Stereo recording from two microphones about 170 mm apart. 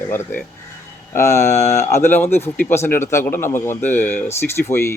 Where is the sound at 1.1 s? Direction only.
15° left (ahead or behind).